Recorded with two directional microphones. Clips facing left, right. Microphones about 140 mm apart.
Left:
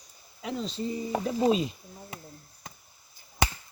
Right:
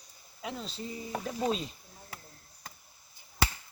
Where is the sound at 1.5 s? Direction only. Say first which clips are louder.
Left 7 dB; 5° left (ahead or behind).